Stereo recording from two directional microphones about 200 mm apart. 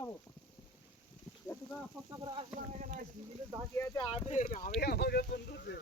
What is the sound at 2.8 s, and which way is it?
Speech, 40° right (ahead or behind).